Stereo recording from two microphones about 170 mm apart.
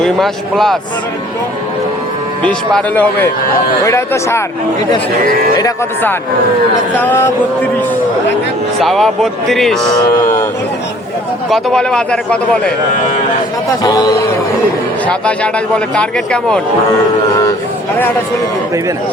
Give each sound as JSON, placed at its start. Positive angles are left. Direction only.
{"t": 0.0, "sound": "speech", "side_deg": 0}
{"t": 2.4, "sound": "speech", "side_deg": 5}
{"t": 5.5, "sound": "speech", "side_deg": 15}
{"t": 8.8, "sound": "speech", "side_deg": 0}
{"t": 9.9, "sound": "speech", "side_deg": 20}
{"t": 11.4, "sound": "speech", "side_deg": 0}
{"t": 13.8, "sound": "speech", "side_deg": 20}
{"t": 15.0, "sound": "speech", "side_deg": 5}